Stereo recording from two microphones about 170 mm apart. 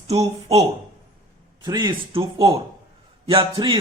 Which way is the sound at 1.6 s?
25° right (ahead or behind).